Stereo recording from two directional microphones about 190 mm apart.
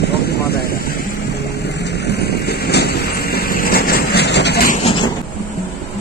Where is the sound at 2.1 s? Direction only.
60° left (ahead or behind).